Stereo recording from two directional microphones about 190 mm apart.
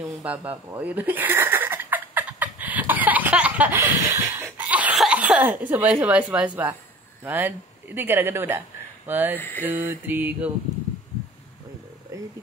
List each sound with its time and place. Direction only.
0.0 s a sound: 10° right (ahead or behind)
7.2 s speech: 10° right (ahead or behind)
9.4 s mantra: 10° left (ahead or behind)
9.7 s mantra: 10° right (ahead or behind)